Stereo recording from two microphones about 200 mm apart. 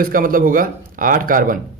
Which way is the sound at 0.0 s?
45° right (ahead or behind).